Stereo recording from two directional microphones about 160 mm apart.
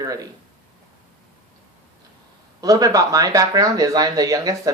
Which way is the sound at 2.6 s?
25° right (ahead or behind).